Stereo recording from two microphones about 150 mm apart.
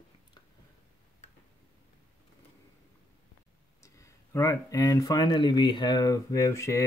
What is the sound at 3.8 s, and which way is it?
Speech, 20° left (ahead or behind).